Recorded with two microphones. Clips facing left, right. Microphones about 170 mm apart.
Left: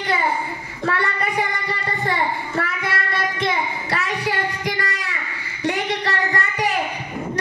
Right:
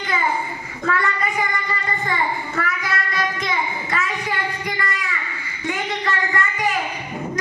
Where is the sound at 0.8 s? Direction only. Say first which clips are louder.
Even; 35° left (ahead or behind).